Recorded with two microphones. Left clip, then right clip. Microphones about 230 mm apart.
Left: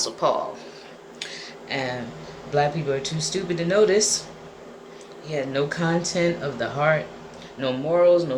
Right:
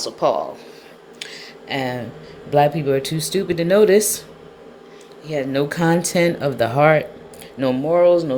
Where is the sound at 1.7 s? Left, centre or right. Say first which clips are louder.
Right 4 dB; right.